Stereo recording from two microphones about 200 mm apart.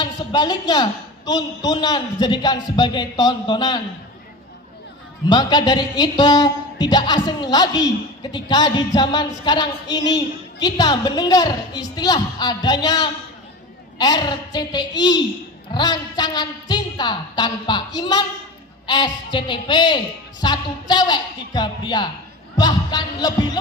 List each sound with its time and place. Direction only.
0.0 s a woman's voice: 20° left (ahead or behind)
5.3 s a woman's voice: 20° left (ahead or behind)